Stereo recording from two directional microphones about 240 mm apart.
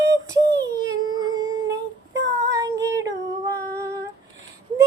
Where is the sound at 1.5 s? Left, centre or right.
Right.